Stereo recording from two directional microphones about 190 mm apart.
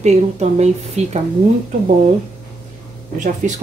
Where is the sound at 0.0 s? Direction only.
35° right (ahead or behind).